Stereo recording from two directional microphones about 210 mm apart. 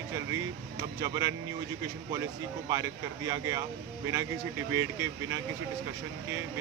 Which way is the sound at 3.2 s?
15° right (ahead or behind).